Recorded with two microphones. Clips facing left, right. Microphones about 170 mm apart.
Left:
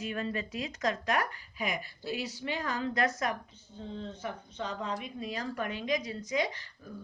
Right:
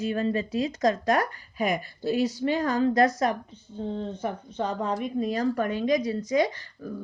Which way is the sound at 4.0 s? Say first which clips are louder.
Right 8 dB; 50° right (ahead or behind).